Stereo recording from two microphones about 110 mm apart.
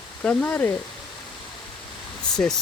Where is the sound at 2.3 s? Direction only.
5° left (ahead or behind).